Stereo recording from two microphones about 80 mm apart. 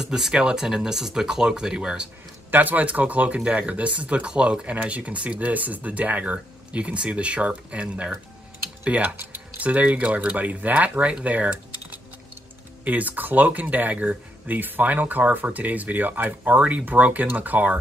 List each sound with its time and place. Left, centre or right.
0.0 s speech: centre
2.5 s speech: right